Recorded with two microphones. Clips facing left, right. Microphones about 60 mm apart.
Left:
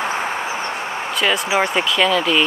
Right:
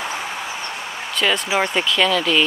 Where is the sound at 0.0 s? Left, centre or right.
Left.